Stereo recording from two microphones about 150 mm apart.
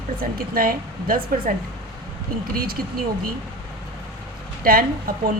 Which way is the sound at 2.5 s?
85° right.